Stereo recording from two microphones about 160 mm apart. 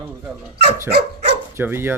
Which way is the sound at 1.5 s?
15° right (ahead or behind).